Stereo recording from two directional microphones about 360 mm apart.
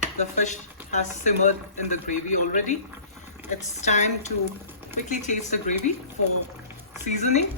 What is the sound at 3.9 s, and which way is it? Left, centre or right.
Speech, centre.